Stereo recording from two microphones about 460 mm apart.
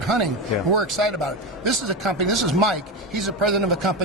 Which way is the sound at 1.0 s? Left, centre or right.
Right.